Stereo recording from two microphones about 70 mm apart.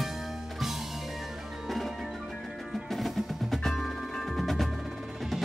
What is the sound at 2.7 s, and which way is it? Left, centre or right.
Percussion, centre.